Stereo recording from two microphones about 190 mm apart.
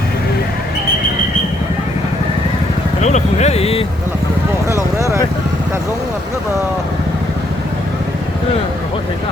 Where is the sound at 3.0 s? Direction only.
35° left (ahead or behind).